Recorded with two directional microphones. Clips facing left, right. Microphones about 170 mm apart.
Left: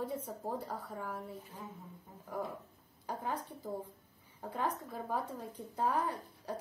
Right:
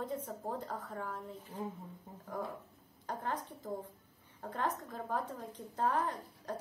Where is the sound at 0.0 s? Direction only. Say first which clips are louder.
Even; 10° left (ahead or behind).